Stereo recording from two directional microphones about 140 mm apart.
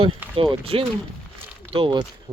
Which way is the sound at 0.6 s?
45° right (ahead or behind).